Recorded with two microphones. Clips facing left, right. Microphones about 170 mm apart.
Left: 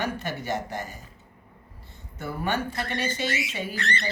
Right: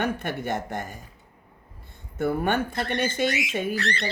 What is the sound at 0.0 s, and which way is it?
Speech, 60° right (ahead or behind).